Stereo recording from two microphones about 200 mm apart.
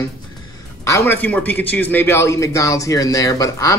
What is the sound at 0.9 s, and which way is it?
A man's voice, 10° left (ahead or behind).